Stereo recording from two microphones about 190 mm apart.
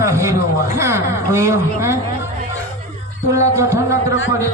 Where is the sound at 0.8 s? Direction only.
15° right (ahead or behind).